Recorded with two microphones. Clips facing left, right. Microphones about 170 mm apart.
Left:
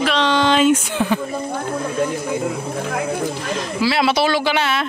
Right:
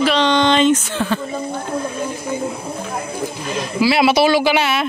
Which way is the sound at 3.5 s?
10° right (ahead or behind).